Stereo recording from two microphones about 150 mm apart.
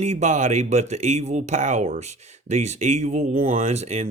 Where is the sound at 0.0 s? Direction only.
50° right (ahead or behind).